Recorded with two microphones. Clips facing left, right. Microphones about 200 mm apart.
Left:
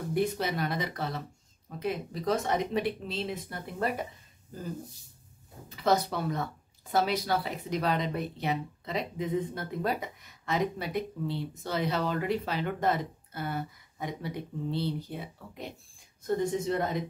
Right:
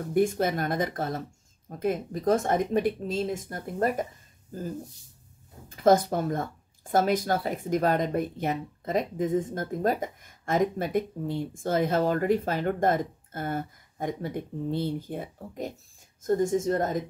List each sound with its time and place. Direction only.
0.1 s speech: 50° right (ahead or behind)
5.7 s speech: 50° right (ahead or behind)